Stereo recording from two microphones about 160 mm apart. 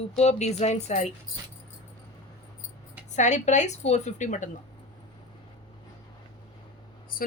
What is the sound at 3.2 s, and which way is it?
A woman's voice, 50° left (ahead or behind).